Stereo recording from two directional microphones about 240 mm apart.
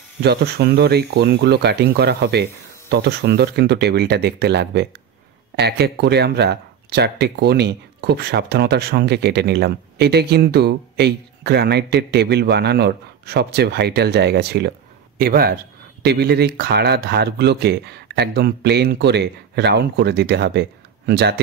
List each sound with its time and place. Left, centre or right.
0.2 s a man's voice: right